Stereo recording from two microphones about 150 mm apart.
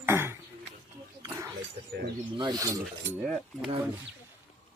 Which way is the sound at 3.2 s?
5° right (ahead or behind).